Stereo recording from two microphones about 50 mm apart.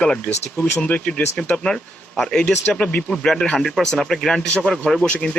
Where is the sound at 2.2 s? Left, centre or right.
Centre.